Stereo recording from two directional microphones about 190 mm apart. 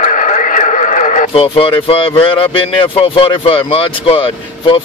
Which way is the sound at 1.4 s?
25° left (ahead or behind).